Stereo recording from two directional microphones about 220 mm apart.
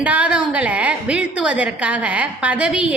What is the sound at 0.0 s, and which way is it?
A woman's voice, 5° right (ahead or behind).